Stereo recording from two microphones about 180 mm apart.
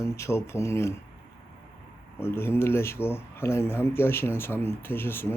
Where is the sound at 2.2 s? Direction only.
15° left (ahead or behind).